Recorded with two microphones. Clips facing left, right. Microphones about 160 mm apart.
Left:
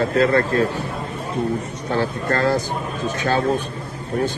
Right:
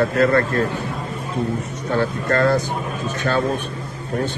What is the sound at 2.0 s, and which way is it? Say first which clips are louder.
Speech: right 2 dB; 55° right (ahead or behind).